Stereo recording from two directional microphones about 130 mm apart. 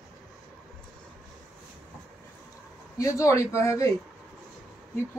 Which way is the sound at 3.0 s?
25° left (ahead or behind).